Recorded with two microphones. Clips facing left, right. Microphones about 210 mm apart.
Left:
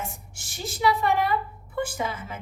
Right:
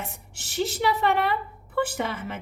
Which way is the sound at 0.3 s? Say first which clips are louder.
Right 8 dB; 65° right (ahead or behind).